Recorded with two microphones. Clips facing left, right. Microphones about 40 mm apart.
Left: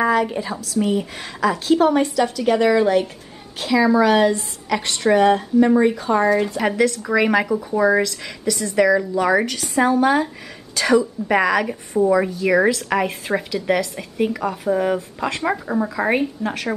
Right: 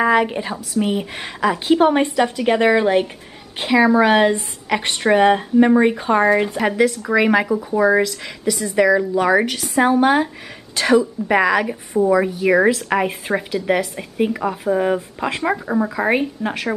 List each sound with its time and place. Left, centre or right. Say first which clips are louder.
0.0 s a woman's voice: right 2 dB; right
6.6 s a woman's voice: right 1 dB; centre